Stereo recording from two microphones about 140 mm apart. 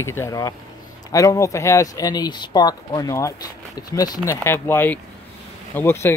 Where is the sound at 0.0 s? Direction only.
20° left (ahead or behind).